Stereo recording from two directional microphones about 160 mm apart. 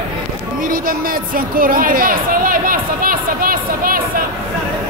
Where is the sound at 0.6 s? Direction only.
65° right (ahead or behind).